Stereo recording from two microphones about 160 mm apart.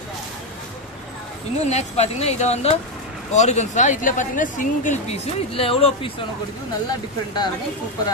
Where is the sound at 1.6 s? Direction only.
45° left (ahead or behind).